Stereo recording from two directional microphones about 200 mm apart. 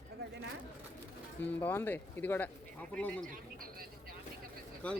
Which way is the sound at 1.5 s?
10° left (ahead or behind).